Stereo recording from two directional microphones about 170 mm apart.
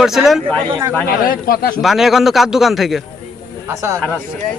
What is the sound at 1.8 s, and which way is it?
A man's voice, centre (ahead or behind).